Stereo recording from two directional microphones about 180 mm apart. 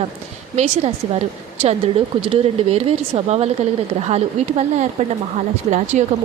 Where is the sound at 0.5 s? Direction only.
35° right (ahead or behind).